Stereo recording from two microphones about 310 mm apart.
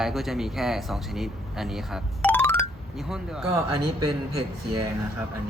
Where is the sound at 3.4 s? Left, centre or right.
Centre.